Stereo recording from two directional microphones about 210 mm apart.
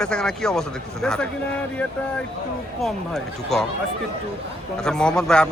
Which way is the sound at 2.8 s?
Centre (ahead or behind).